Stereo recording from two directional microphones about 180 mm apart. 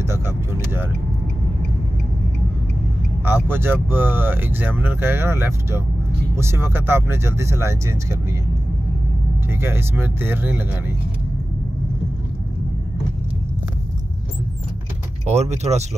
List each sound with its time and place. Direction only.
3.3 s speech: 10° right (ahead or behind)
9.5 s speech: 15° right (ahead or behind)
15.2 s speech: 40° right (ahead or behind)